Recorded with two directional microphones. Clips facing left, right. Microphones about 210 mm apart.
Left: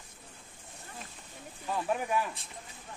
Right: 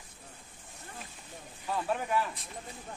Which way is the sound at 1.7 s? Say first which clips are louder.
Even; 10° left (ahead or behind).